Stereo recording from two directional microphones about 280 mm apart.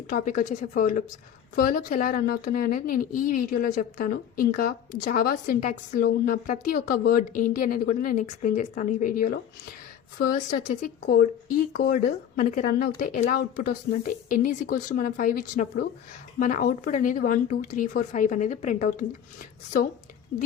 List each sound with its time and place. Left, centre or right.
0.1 s a woman's voice: left